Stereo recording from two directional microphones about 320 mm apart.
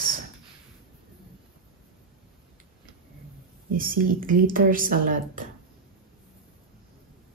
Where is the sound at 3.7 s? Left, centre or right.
Right.